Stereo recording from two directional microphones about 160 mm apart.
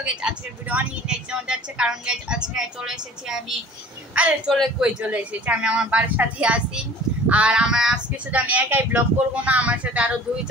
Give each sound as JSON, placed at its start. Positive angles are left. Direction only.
{"t": 0.0, "sound": "speech", "side_deg": -5}